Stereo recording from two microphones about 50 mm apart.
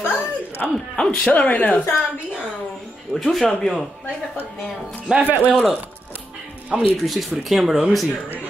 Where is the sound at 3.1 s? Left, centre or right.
Centre.